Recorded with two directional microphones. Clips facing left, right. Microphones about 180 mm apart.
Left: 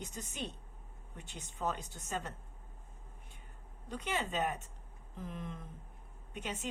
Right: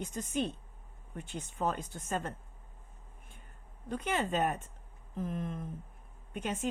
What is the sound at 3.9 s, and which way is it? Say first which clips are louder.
A woman's voice: right 5 dB; 50° right (ahead or behind).